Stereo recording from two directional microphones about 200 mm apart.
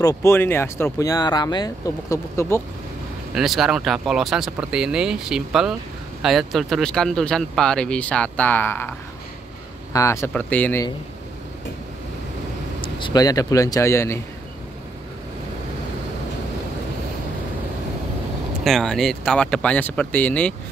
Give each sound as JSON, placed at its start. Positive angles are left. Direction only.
{"t": 0.0, "sound": "speech", "side_deg": 15}
{"t": 3.3, "sound": "speech", "side_deg": 0}
{"t": 9.9, "sound": "speech", "side_deg": 15}
{"t": 12.8, "sound": "speech", "side_deg": 20}
{"t": 18.6, "sound": "speech", "side_deg": 0}